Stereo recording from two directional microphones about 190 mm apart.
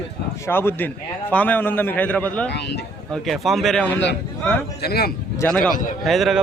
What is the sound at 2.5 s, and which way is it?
Speech, 60° left (ahead or behind).